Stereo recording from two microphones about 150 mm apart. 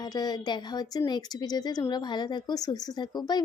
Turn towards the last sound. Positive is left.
turn(degrees=25)  # may be behind; listen again after turning